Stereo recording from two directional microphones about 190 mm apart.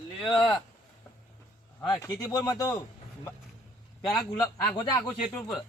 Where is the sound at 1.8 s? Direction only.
20° left (ahead or behind).